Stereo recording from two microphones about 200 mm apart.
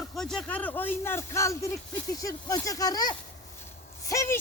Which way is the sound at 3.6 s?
15° left (ahead or behind).